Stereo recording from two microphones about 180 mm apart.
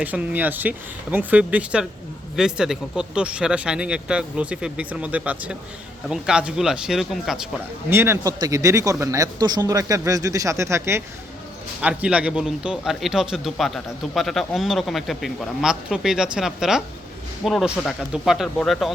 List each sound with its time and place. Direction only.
0.0 s speech: 10° right (ahead or behind)
7.9 s speech: 15° right (ahead or behind)